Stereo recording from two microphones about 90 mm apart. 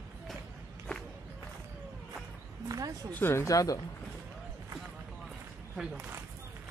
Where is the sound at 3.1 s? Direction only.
25° left (ahead or behind).